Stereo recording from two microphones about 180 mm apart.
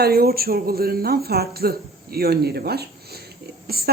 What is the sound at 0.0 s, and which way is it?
Speech, 60° right (ahead or behind).